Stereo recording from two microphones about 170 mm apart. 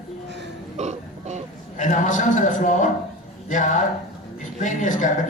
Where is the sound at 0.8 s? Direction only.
40° right (ahead or behind).